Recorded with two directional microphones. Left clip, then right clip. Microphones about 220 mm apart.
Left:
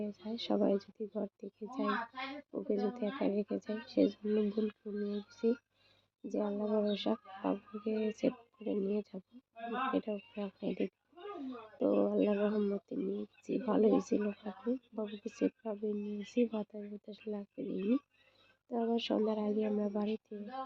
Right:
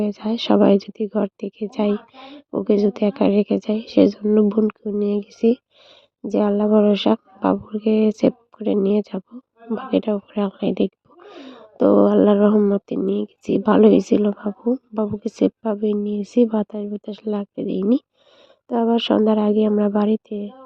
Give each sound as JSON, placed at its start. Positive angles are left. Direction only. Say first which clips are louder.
{"t": 0.0, "sound": "speech", "louder": "right 18 dB", "side_deg": -40}